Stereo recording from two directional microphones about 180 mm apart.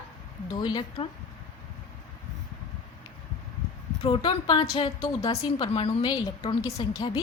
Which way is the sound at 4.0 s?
25° left (ahead or behind).